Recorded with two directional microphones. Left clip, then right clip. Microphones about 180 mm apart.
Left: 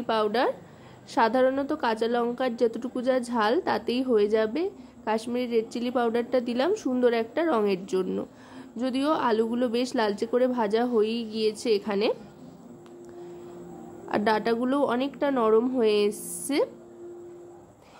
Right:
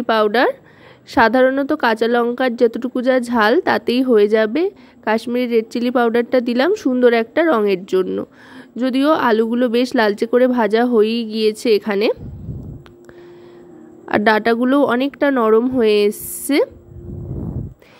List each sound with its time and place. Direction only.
0.0 s a woman's voice: 35° right (ahead or behind)
14.0 s a woman's voice: 40° right (ahead or behind)